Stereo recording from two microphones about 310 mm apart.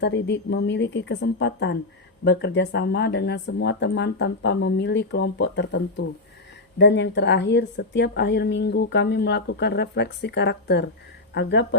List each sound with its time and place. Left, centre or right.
0.0 s a woman's voice: left